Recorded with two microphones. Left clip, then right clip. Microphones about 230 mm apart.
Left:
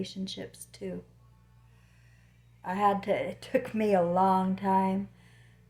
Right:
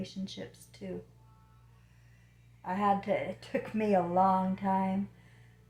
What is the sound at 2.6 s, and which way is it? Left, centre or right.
Speech, left.